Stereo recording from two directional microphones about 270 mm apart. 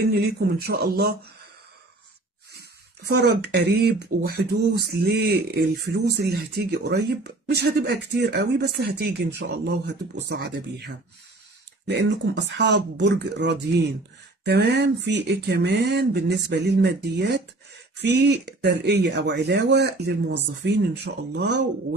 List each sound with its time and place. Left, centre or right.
0.0 s speech: right
3.1 s speech: right
11.9 s speech: right